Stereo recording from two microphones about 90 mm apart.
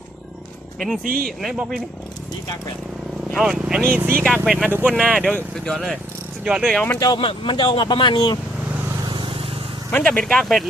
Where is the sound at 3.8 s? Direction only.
20° right (ahead or behind).